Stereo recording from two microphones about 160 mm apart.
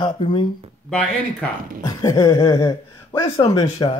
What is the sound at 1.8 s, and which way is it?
Speech, 20° left (ahead or behind).